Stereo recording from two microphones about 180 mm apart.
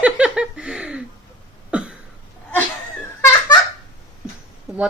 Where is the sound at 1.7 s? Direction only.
5° right (ahead or behind).